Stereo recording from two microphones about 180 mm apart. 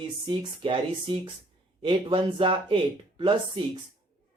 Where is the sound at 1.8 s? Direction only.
25° right (ahead or behind).